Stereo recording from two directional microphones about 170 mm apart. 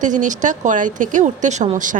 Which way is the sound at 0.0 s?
45° right (ahead or behind).